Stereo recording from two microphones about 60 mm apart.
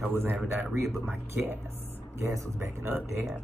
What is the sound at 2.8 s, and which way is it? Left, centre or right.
Speech, right.